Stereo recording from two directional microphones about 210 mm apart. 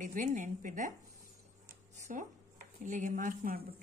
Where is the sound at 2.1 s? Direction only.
40° right (ahead or behind).